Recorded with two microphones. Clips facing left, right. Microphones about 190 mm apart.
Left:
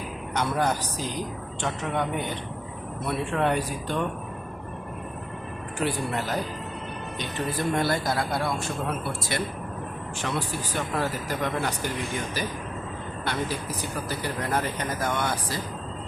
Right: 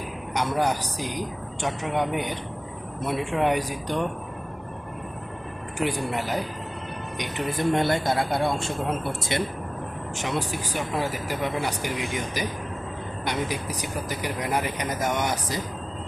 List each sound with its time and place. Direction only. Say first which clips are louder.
0.3 s speech: right 1 dB; 10° right (ahead or behind)
5.8 s a man's voice: right 1 dB; 15° right (ahead or behind)
10.2 s speech: right 1 dB; 15° right (ahead or behind)